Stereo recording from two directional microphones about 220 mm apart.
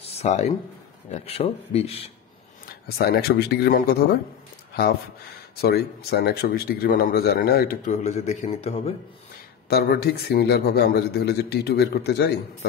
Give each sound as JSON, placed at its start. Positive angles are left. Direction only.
{"t": 0.0, "sound": "a sound", "side_deg": 30}
{"t": 1.1, "sound": "speech", "side_deg": 30}
{"t": 3.0, "sound": "speech", "side_deg": 45}
{"t": 5.6, "sound": "speech", "side_deg": 45}
{"t": 9.7, "sound": "speech", "side_deg": 45}